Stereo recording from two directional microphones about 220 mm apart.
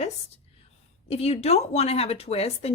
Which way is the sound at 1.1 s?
30° left (ahead or behind).